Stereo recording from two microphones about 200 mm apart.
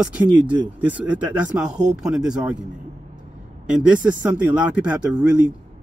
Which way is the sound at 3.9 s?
5° right (ahead or behind).